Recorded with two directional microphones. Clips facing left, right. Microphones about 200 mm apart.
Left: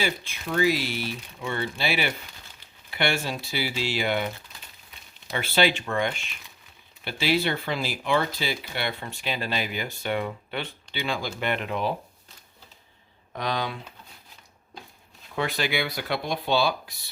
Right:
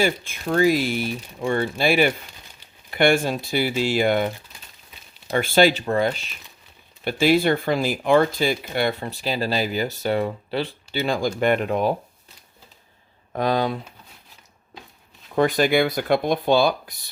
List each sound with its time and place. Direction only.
0.0 s speech: 50° right (ahead or behind)
5.3 s speech: 50° right (ahead or behind)
7.0 s speech: 50° right (ahead or behind)
13.3 s speech: 45° right (ahead or behind)
15.4 s speech: 45° right (ahead or behind)